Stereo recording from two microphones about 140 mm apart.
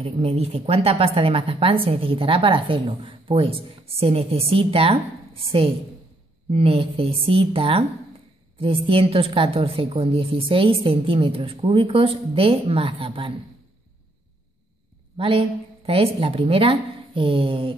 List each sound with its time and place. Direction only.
0.0 s speech: 45° right (ahead or behind)
6.5 s a woman's voice: 40° right (ahead or behind)
15.1 s a woman's voice: 40° right (ahead or behind)